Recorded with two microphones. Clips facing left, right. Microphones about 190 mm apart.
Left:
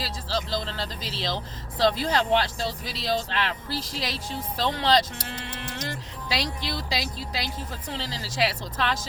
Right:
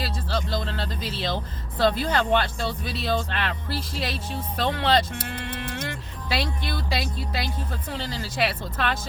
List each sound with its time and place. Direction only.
0.0 s speech: 55° right (ahead or behind)